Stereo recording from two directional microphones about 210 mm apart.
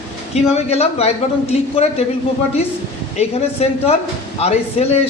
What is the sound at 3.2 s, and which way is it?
A man's voice, 30° left (ahead or behind).